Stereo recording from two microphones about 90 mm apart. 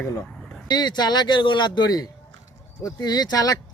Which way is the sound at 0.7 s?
55° left (ahead or behind).